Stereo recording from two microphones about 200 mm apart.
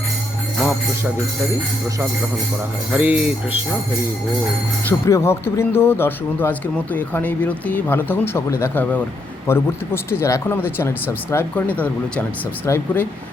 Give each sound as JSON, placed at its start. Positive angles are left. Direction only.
{"t": 2.9, "sound": "speech", "side_deg": -5}
{"t": 4.9, "sound": "speech", "side_deg": 15}
{"t": 12.6, "sound": "speech", "side_deg": 10}